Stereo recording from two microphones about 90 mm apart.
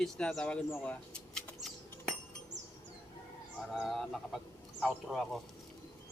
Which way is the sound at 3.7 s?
Centre (ahead or behind).